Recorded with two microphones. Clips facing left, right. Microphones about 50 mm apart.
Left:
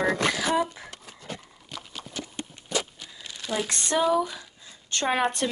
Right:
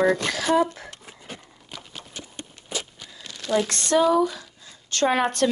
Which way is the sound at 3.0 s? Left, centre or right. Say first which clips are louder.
Right 1 dB; centre.